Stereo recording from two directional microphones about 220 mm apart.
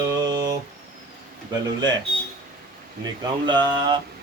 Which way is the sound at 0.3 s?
20° right (ahead or behind).